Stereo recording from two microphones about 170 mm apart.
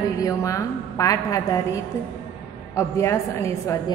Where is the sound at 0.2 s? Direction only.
20° left (ahead or behind).